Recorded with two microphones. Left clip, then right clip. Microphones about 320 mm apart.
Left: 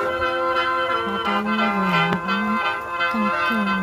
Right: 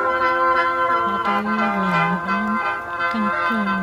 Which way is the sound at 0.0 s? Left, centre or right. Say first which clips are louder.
Right 4 dB; centre.